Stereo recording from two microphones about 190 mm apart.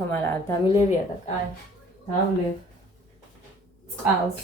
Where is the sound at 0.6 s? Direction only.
35° left (ahead or behind).